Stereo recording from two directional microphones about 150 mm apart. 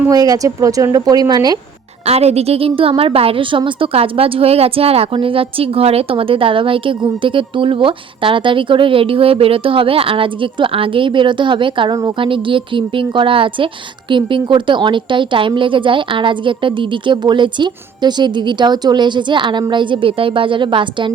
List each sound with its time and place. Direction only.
0.1 s a woman's voice: 25° right (ahead or behind)
2.0 s a woman's voice: 45° right (ahead or behind)